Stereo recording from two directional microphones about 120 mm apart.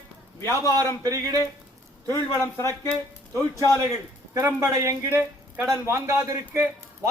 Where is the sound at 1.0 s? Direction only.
30° right (ahead or behind).